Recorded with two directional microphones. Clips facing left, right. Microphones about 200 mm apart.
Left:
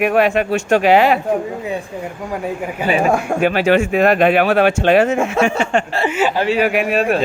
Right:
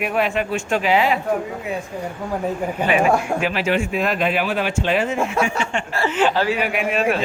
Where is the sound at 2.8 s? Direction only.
40° left (ahead or behind).